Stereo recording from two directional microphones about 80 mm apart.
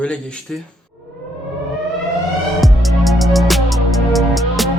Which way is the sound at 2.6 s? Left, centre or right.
Centre.